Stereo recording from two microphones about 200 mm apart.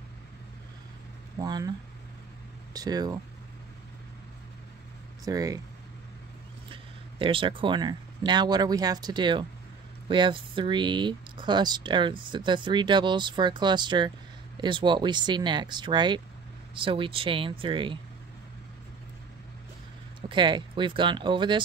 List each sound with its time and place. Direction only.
1.4 s speech: 20° right (ahead or behind)
2.7 s speech: 20° right (ahead or behind)
5.2 s speech: 15° right (ahead or behind)
6.7 s speech: 25° right (ahead or behind)
20.2 s speech: 25° right (ahead or behind)